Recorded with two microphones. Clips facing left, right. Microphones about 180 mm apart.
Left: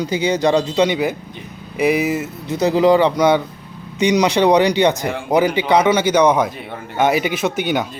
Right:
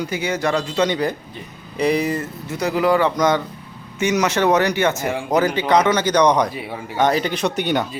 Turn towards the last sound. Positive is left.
turn(degrees=0)  # may be behind; listen again after turning